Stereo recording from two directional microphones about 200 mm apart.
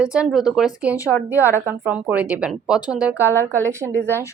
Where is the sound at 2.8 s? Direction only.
20° left (ahead or behind).